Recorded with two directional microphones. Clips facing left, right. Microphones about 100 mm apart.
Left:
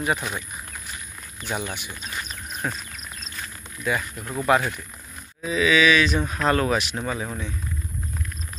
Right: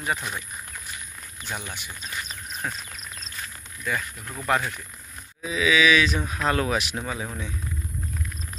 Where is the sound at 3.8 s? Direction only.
15° left (ahead or behind).